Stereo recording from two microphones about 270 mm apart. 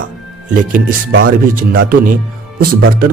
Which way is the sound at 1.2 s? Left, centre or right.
Right.